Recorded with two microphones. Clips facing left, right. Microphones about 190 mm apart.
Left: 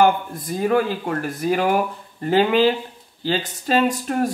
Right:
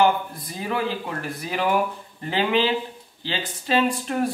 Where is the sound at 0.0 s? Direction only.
50° left (ahead or behind).